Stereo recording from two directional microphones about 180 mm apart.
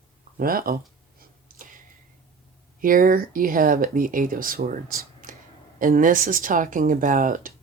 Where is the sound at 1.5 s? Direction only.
50° right (ahead or behind).